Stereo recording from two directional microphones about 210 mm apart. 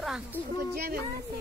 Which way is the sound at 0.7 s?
45° right (ahead or behind).